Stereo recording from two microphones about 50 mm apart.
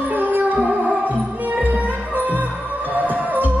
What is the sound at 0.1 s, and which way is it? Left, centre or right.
Music, right.